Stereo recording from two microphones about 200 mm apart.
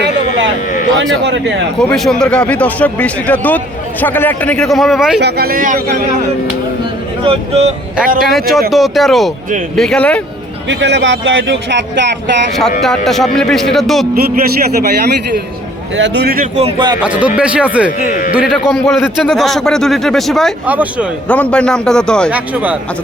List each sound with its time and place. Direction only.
1.2 s speech: 60° right (ahead or behind)
1.8 s a man's voice: 5° left (ahead or behind)
5.2 s a man's voice: 50° right (ahead or behind)
7.3 s speech: 30° right (ahead or behind)
8.2 s a man's voice: centre (ahead or behind)
10.7 s speech: 60° right (ahead or behind)
13.1 s a man's voice: centre (ahead or behind)
14.1 s a man's voice: 50° right (ahead or behind)
16.0 s speech: 60° right (ahead or behind)
16.6 s a man's voice: 25° right (ahead or behind)
17.0 s a man's voice: 5° right (ahead or behind)
21.2 s a man's voice: 5° left (ahead or behind)
22.3 s speech: 5° right (ahead or behind)